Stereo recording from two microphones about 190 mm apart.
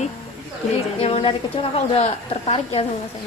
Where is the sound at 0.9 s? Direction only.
30° left (ahead or behind).